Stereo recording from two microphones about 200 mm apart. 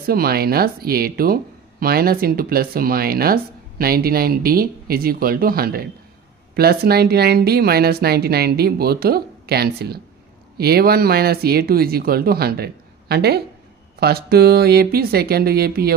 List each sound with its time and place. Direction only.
0.0 s speech: 50° right (ahead or behind)